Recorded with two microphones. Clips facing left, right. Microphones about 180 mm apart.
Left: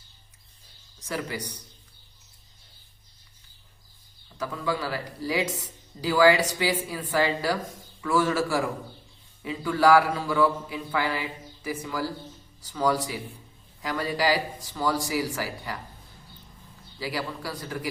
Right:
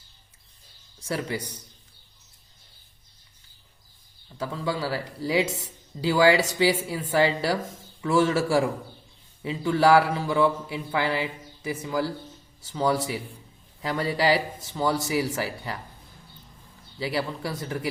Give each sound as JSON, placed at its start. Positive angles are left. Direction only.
{"t": 0.9, "sound": "speech", "side_deg": -30}
{"t": 4.4, "sound": "speech", "side_deg": -30}
{"t": 17.0, "sound": "speech", "side_deg": -25}